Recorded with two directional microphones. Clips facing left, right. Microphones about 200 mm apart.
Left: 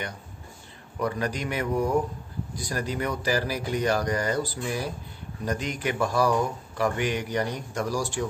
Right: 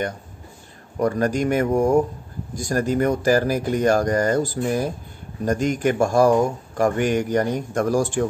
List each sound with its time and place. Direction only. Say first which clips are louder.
0.9 s speech: right 8 dB; 45° right (ahead or behind)